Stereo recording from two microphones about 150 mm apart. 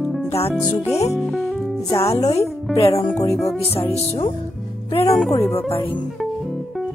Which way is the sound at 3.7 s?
40° left (ahead or behind).